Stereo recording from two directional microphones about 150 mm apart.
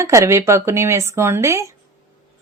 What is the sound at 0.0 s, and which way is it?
Speech, 20° right (ahead or behind).